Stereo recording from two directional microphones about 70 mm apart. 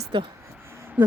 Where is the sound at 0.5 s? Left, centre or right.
Right.